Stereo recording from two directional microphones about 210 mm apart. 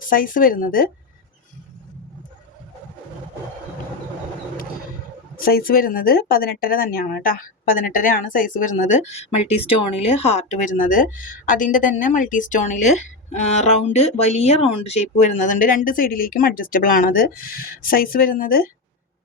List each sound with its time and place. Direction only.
0.0 s speech: 40° left (ahead or behind)
5.5 s speech: 45° left (ahead or behind)